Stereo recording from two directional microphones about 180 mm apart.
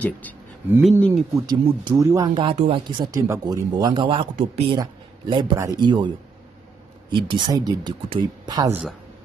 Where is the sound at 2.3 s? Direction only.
30° right (ahead or behind).